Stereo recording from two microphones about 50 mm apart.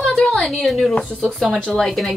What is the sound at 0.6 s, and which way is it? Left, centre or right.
Speech, centre.